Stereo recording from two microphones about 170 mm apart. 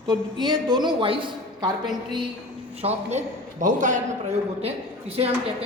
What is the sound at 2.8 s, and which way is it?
Speech, 40° right (ahead or behind).